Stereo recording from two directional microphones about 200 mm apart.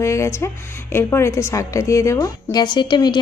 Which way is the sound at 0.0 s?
15° left (ahead or behind).